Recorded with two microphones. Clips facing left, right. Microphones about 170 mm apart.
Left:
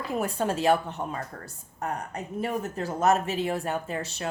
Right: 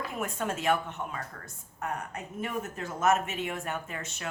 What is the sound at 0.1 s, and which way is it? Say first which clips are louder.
A woman's voice: left 10 dB; 35° left (ahead or behind).